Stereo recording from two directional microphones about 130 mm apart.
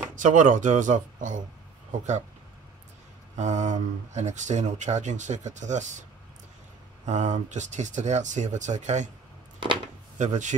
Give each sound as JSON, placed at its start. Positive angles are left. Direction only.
{"t": 0.1, "sound": "speech", "side_deg": -75}
{"t": 3.3, "sound": "speech", "side_deg": -65}
{"t": 7.1, "sound": "speech", "side_deg": -65}
{"t": 10.1, "sound": "speech", "side_deg": -70}